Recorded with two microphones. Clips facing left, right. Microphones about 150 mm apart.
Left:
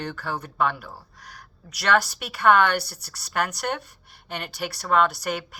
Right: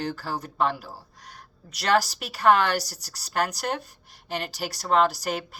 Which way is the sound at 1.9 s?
35° right (ahead or behind).